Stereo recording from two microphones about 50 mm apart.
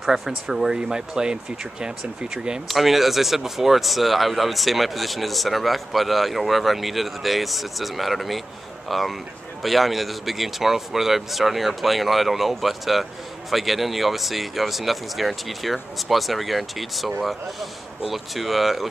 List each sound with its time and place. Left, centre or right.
0.0 s speech: centre
0.5 s speech: centre
2.7 s speech: centre